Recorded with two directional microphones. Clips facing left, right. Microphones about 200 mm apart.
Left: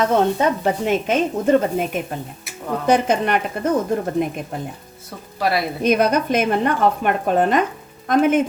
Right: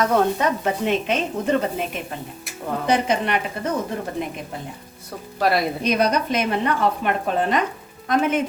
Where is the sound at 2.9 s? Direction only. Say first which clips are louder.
Left 4 dB; 45° left (ahead or behind).